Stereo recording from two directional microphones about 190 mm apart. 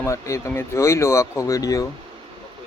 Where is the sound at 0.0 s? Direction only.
15° left (ahead or behind).